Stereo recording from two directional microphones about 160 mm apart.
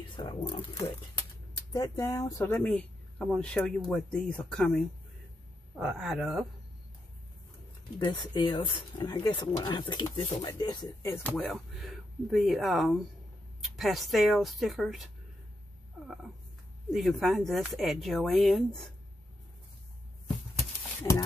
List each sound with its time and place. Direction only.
0.1 s speech: 30° left (ahead or behind); by 6.4 s 5° right (ahead or behind)
8.0 s speech: 30° left (ahead or behind); by 15.0 s centre (ahead or behind)
16.9 s speech: centre (ahead or behind)